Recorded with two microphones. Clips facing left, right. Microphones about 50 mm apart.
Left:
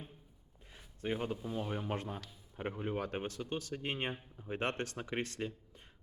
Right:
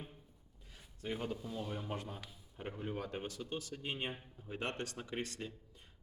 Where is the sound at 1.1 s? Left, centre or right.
Centre.